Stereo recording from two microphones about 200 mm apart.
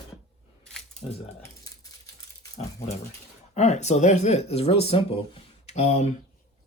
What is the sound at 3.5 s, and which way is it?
Speech, 35° left (ahead or behind).